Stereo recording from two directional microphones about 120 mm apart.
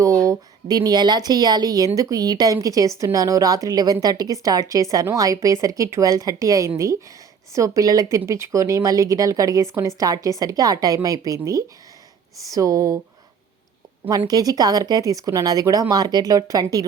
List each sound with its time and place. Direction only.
0.0 s speech: 30° right (ahead or behind)
14.3 s speech: 35° right (ahead or behind)